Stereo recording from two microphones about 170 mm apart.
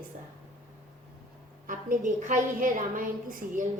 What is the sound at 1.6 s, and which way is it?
A woman's voice, 50° right (ahead or behind).